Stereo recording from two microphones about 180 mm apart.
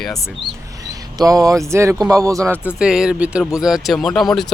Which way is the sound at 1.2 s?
20° right (ahead or behind).